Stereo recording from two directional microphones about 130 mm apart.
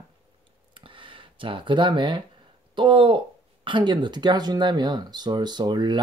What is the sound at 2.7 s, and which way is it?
Speech, 40° right (ahead or behind).